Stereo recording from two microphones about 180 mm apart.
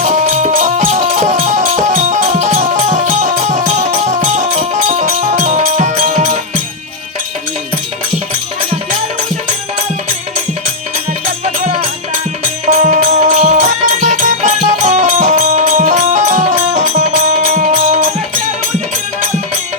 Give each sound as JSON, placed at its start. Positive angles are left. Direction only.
{"t": 0.0, "sound": "music", "side_deg": -40}
{"t": 12.6, "sound": "music", "side_deg": -40}